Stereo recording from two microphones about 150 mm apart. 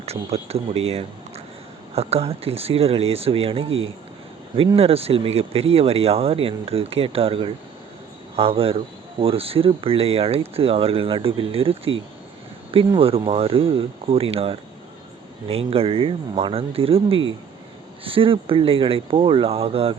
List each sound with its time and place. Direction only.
0.0 s speech: 45° right (ahead or behind)